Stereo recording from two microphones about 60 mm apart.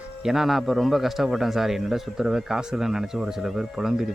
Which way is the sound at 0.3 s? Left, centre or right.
Centre.